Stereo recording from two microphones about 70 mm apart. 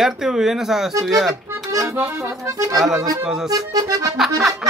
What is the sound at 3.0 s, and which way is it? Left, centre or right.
Speech, right.